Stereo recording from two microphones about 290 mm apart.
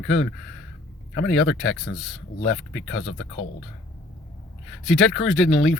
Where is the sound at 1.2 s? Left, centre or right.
Centre.